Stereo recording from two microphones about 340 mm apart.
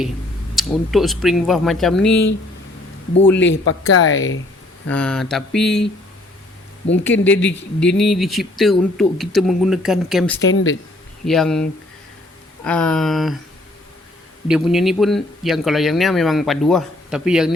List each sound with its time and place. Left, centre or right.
0.5 s speech: centre
3.3 s speech: left
4.9 s speech: centre
7.3 s speech: centre
10.4 s speech: left
11.3 s speech: centre
12.6 s speech: centre
14.4 s speech: centre